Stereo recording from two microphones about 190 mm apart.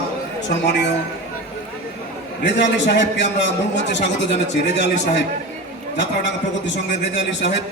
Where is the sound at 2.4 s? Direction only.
65° left (ahead or behind).